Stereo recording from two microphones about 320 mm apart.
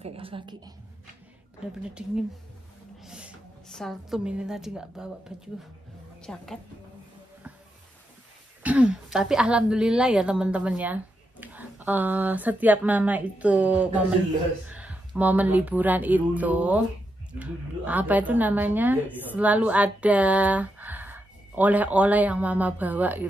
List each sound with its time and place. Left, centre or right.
0.0 s a woman's voice: centre
1.6 s a woman's voice: centre
3.0 s a woman's voice: centre
6.2 s a woman's voice: centre
8.6 s a woman's voice: centre